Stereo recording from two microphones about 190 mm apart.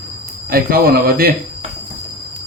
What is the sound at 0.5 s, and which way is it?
Speech, 50° right (ahead or behind).